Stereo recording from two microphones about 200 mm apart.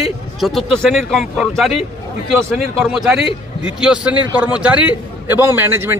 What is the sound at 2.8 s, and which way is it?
Speech, centre (ahead or behind).